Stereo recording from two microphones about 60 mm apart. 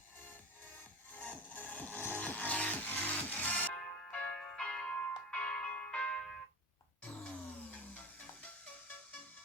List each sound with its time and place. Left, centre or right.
1.1 s music: left
7.7 s music: left